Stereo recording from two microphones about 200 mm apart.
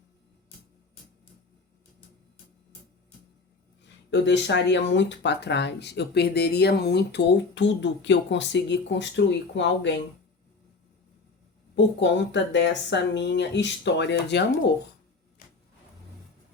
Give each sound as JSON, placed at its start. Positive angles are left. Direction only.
{"t": 4.1, "sound": "speech", "side_deg": 65}
{"t": 11.9, "sound": "speech", "side_deg": 65}